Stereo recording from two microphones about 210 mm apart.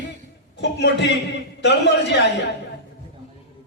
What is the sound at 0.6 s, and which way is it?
A man's voice, 55° left (ahead or behind).